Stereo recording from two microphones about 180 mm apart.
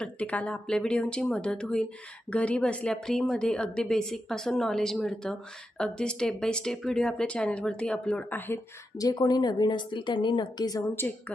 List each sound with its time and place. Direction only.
0.0 s a woman's voice: 5° left (ahead or behind)
9.0 s speech: 20° left (ahead or behind)